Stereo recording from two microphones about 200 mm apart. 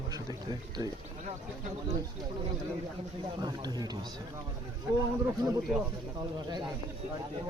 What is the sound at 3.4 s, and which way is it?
Speech, 20° right (ahead or behind).